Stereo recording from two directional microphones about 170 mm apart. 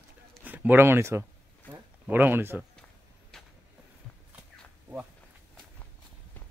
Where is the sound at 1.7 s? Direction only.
10° right (ahead or behind).